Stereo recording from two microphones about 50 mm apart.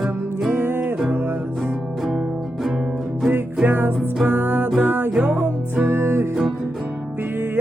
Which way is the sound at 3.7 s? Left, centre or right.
Right.